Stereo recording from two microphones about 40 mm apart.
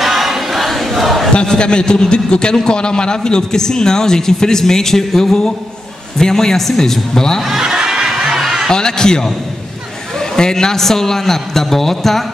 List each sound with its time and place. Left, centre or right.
0.0 s battle cry: centre
1.3 s a man's voice: left
7.4 s a sound: centre
8.2 s snicker: centre
8.6 s a man's voice: centre